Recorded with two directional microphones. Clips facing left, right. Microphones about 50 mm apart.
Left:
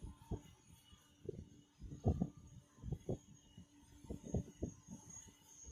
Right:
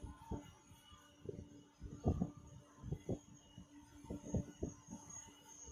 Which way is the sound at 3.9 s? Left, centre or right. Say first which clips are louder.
Right 1 dB; right.